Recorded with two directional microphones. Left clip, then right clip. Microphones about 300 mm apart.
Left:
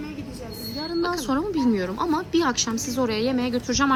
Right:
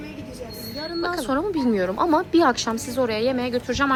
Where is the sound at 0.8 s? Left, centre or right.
Centre.